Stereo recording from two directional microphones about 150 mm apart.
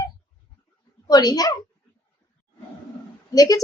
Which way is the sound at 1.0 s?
25° left (ahead or behind).